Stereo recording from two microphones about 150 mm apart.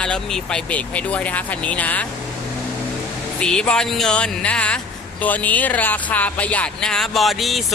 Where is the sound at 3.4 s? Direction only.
5° left (ahead or behind).